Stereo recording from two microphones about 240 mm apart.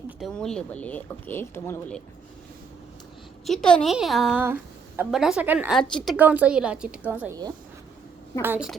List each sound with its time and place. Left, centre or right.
0.2 s a woman's voice: centre
3.4 s a woman's voice: centre